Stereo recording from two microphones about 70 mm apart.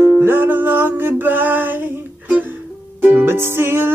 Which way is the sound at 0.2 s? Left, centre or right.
Right.